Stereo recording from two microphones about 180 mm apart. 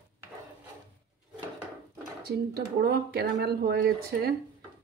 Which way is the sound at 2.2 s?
60° right (ahead or behind).